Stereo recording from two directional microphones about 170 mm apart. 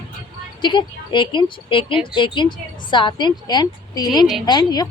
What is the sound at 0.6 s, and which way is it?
Speech, 30° left (ahead or behind).